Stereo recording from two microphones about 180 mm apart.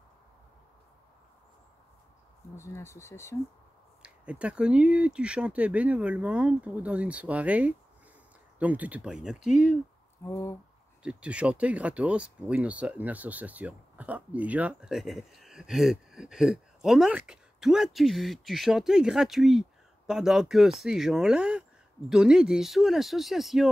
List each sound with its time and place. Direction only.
2.5 s speech: 15° left (ahead or behind)
4.0 s speech: 5° right (ahead or behind)
10.2 s speech: 15° left (ahead or behind)
11.0 s speech: 5° right (ahead or behind)